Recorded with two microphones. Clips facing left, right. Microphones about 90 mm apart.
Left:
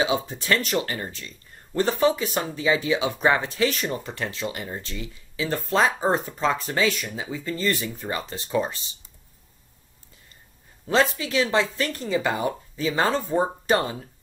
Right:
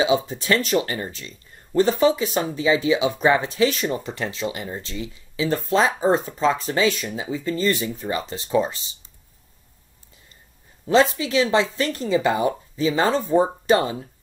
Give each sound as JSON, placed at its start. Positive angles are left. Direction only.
{"t": 0.4, "sound": "speech", "side_deg": -20}
{"t": 11.0, "sound": "speech", "side_deg": -20}